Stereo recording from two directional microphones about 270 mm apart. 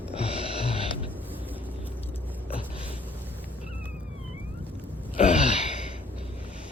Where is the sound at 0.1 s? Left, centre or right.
Left.